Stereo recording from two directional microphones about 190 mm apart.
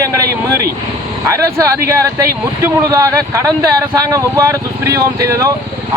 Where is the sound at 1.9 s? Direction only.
15° right (ahead or behind).